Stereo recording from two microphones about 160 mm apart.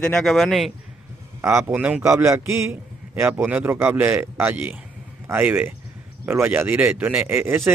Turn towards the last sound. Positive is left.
turn(degrees=-15)  # may be behind; listen again after turning